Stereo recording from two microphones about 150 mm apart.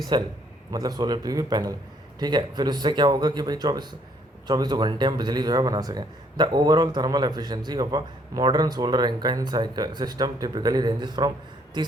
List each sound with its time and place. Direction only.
0.1 s speech: 30° right (ahead or behind)